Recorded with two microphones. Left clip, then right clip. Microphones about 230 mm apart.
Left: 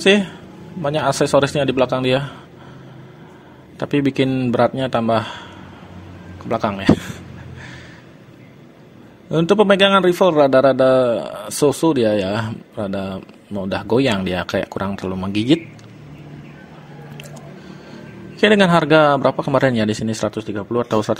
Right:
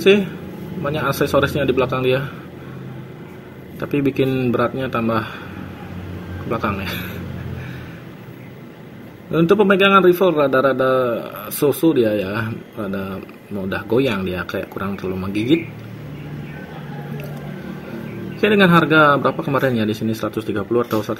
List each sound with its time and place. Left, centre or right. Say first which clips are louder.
0.8 s a man's voice: left 2 dB; left
3.8 s a man's voice: left 1 dB; left
6.5 s a man's voice: left 2 dB; left
9.3 s a man's voice: left 1 dB; left
18.6 s a man's voice: right 3 dB; left